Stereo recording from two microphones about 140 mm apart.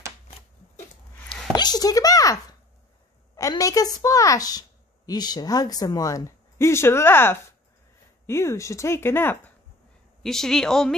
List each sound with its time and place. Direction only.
1.5 s a child's voice: 30° left (ahead or behind)
10.2 s speech: 5° left (ahead or behind)